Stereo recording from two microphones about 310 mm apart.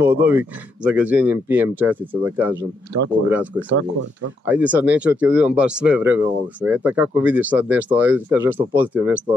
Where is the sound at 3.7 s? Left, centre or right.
Right.